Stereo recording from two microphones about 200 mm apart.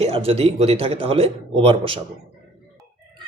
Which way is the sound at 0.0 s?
30° right (ahead or behind).